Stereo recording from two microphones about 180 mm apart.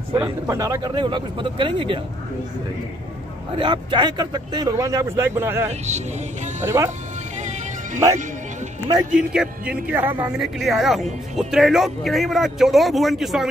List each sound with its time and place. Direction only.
0.1 s speech: 15° right (ahead or behind)
3.5 s speech: 25° right (ahead or behind)
5.7 s speech: 40° right (ahead or behind)
6.6 s speech: 15° right (ahead or behind)
9.1 s speech: 5° right (ahead or behind)